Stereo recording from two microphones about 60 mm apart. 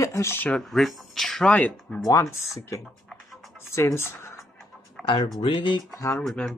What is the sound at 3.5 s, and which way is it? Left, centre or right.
Speech, left.